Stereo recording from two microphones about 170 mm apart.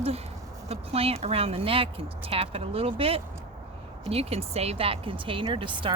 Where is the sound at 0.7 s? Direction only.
35° right (ahead or behind).